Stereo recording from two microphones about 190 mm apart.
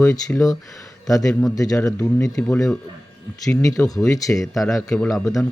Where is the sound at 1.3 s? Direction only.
5° left (ahead or behind).